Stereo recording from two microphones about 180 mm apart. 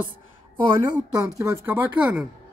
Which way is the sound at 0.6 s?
25° right (ahead or behind).